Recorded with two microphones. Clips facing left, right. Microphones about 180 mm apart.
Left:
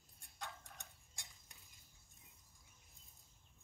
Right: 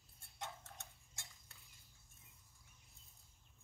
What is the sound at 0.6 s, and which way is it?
Tick-tock, 15° left (ahead or behind).